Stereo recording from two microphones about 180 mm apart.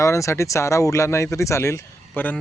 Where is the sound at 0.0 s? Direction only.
15° left (ahead or behind).